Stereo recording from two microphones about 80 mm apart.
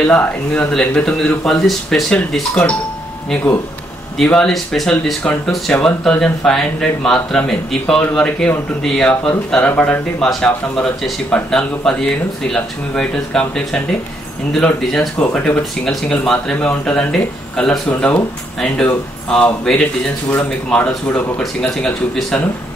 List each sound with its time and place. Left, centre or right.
0.0 s speech: centre
4.2 s speech: centre
5.8 s speech: centre
9.6 s speech: centre
15.8 s speech: centre
21.4 s speech: centre